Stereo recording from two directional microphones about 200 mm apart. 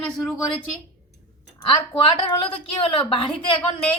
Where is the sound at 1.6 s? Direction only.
25° left (ahead or behind).